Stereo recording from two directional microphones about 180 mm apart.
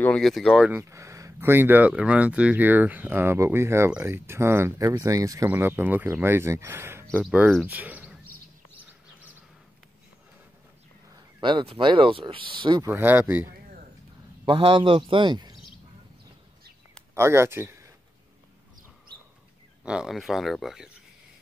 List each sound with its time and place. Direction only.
0.0 s speech: 5° left (ahead or behind)
0.7 s speech: 15° right (ahead or behind)
11.4 s speech: 30° right (ahead or behind)
12.8 s speech: 10° right (ahead or behind)
14.4 s speech: 30° right (ahead or behind)
17.1 s speech: 15° right (ahead or behind)
19.8 s speech: 5° right (ahead or behind)